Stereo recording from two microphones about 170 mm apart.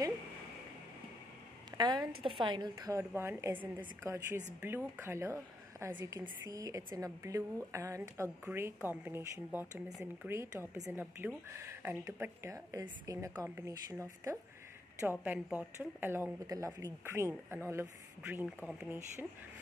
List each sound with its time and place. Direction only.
1.8 s a woman's voice: 25° right (ahead or behind); by 18.9 s 5° right (ahead or behind)